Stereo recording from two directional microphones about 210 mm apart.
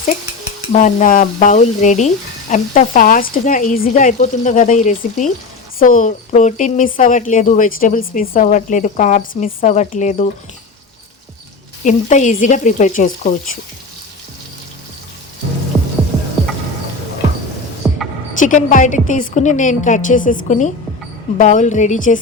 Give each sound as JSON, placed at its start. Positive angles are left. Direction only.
{"t": 0.7, "sound": "speech", "side_deg": 35}
{"t": 11.9, "sound": "speech", "side_deg": 35}
{"t": 15.7, "sound": "music", "side_deg": 0}
{"t": 17.8, "sound": "a sound", "side_deg": -10}
{"t": 18.3, "sound": "speech", "side_deg": 35}